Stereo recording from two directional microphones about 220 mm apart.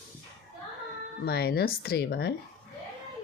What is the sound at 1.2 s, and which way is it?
Speech, 45° left (ahead or behind).